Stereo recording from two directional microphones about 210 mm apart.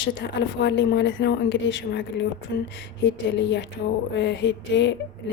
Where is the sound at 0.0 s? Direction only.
55° left (ahead or behind).